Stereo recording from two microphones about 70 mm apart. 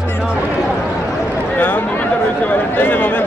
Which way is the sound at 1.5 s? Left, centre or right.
Left.